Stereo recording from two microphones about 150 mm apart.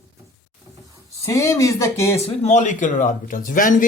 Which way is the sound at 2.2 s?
45° left (ahead or behind).